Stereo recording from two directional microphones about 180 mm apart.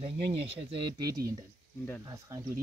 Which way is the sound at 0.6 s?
25° right (ahead or behind).